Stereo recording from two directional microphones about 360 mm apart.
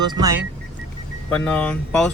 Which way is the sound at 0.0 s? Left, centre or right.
Centre.